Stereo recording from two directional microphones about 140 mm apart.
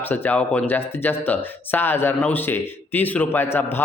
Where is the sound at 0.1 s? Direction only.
10° left (ahead or behind).